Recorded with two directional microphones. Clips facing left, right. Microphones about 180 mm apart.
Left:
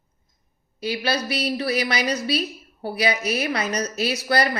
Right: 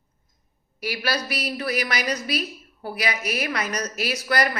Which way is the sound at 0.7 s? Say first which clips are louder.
Left 3 dB; 25° left (ahead or behind).